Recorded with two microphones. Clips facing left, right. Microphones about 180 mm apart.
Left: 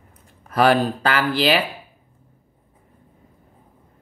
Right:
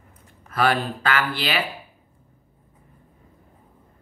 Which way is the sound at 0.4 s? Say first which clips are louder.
Left 5 dB; 40° left (ahead or behind).